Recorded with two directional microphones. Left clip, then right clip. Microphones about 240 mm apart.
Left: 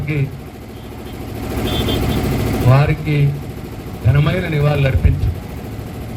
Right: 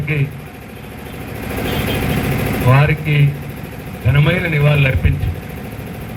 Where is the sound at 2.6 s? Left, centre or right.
Left.